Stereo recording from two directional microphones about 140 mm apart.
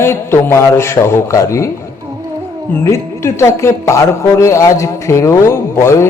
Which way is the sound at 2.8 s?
20° left (ahead or behind).